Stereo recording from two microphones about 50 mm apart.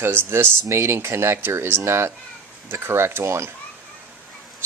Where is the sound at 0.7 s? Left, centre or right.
Right.